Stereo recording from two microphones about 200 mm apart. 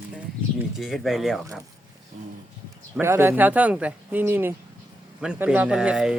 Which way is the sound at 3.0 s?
10° right (ahead or behind).